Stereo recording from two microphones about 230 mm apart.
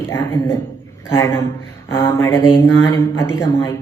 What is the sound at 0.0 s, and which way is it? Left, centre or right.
Speech, centre.